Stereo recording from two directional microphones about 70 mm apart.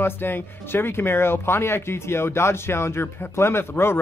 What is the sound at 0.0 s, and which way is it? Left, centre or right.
Speech, left.